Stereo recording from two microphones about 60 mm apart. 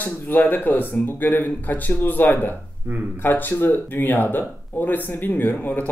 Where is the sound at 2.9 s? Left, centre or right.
Right.